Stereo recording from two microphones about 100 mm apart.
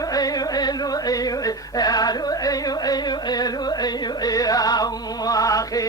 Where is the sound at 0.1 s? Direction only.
40° left (ahead or behind).